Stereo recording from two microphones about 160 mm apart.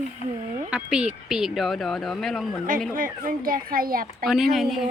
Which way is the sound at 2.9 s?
60° right (ahead or behind).